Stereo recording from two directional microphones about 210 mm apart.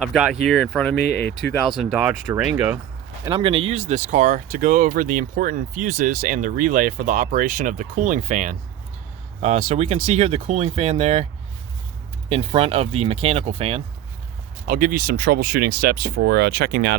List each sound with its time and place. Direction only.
0.0 s speech: centre (ahead or behind)
0.9 s speech: 50° left (ahead or behind)
1.3 s speech: 5° left (ahead or behind)
3.2 s speech: 25° right (ahead or behind)
12.3 s speech: 30° right (ahead or behind)
14.7 s speech: 45° right (ahead or behind)